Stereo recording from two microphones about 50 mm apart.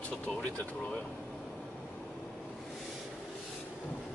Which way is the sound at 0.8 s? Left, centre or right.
Centre.